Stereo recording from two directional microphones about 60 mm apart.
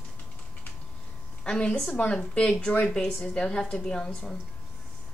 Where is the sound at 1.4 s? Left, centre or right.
Centre.